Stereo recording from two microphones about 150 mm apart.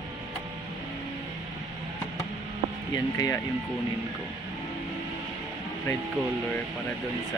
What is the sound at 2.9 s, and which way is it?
Speech, 25° left (ahead or behind).